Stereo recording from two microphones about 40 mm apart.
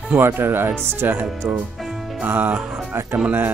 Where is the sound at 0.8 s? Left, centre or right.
Right.